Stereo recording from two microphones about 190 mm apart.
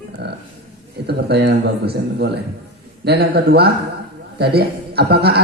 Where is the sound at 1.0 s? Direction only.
60° right (ahead or behind).